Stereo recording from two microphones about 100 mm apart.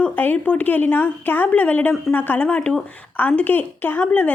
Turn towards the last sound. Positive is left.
turn(degrees=15)  # may be behind; listen again after turning